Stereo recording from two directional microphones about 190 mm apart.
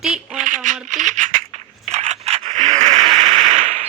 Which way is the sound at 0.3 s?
40° right (ahead or behind).